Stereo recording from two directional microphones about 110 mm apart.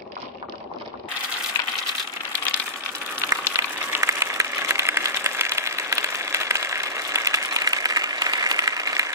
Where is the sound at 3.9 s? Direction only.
25° right (ahead or behind).